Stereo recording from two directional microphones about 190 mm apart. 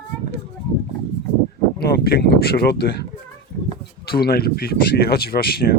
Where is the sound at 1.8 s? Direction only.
55° left (ahead or behind).